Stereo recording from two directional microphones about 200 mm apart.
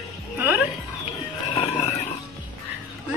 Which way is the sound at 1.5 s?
30° left (ahead or behind).